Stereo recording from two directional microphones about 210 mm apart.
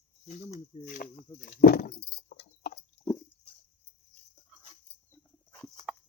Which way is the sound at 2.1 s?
50° left (ahead or behind).